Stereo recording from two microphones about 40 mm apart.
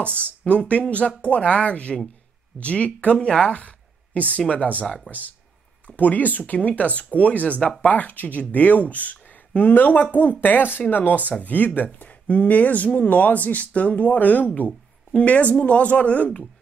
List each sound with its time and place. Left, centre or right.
0.0 s speech: left
5.9 s speech: left